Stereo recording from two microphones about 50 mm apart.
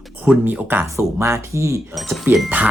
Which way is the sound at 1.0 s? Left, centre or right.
Right.